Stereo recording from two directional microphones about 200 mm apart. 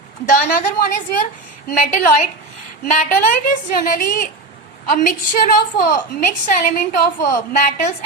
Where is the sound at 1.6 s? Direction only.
45° left (ahead or behind).